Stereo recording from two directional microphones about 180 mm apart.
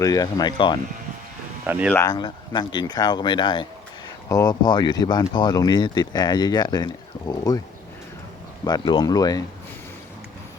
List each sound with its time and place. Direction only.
0.0 s speech: 20° left (ahead or behind)
1.6 s speech: 10° right (ahead or behind)
1.9 s speech: 15° left (ahead or behind)
2.1 s speech: 25° left (ahead or behind)
8.6 s speech: 20° left (ahead or behind)